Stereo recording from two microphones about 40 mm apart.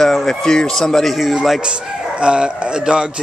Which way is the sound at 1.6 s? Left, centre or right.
Right.